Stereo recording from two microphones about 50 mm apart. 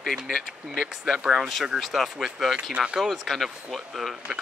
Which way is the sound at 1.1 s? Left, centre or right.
Centre.